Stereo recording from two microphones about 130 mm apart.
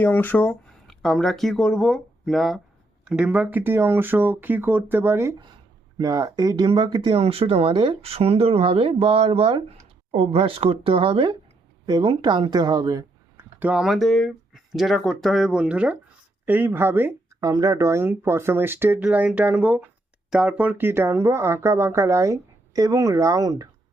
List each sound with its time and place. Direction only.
0.0 s speech: 15° left (ahead or behind); by 5.3 s 20° right (ahead or behind)
6.0 s speech: 30° right (ahead or behind)
13.3 s speech: 10° right (ahead or behind)
17.5 s speech: 25° right (ahead or behind)